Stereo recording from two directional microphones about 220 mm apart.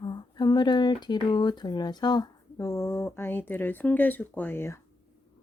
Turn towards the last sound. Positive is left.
turn(degrees=10)  # may be behind; listen again after turning